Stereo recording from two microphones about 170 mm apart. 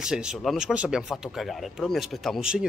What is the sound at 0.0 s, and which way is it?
A man's voice, 5° right (ahead or behind).